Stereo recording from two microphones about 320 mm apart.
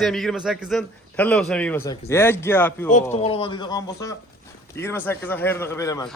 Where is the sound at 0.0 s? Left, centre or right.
Centre.